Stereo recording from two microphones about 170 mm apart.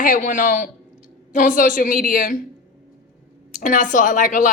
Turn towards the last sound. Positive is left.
turn(degrees=50)  # may be behind; listen again after turning